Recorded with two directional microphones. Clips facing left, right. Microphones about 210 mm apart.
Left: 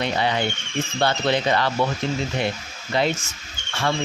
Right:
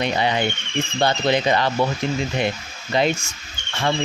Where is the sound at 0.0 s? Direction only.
15° right (ahead or behind).